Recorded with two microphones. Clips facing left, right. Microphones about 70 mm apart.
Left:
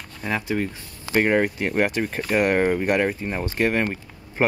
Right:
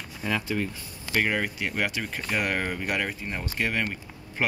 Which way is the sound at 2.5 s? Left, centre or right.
Left.